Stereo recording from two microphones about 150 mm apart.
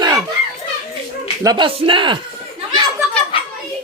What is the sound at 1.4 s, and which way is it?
Speech, 30° right (ahead or behind).